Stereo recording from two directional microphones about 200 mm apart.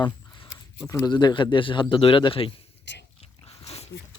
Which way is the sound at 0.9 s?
20° left (ahead or behind).